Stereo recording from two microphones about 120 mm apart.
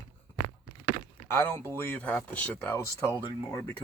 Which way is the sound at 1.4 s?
20° left (ahead or behind).